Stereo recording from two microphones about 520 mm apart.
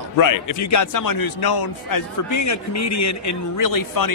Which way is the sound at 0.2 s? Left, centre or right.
Left.